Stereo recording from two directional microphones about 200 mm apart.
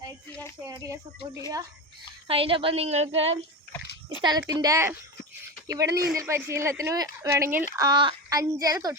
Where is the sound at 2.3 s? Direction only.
25° right (ahead or behind).